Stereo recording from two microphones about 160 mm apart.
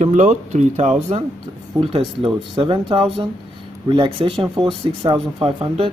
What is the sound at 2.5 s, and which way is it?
Speech, 30° right (ahead or behind).